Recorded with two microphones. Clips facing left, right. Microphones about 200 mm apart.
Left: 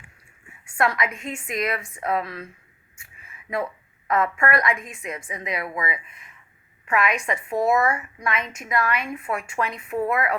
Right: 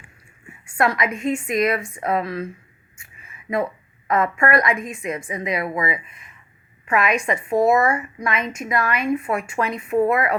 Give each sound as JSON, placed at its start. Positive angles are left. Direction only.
{"t": 0.8, "sound": "a woman's voice", "side_deg": -20}
{"t": 4.1, "sound": "a woman's voice", "side_deg": -20}